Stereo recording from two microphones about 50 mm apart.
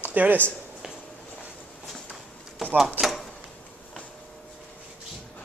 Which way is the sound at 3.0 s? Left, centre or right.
Centre.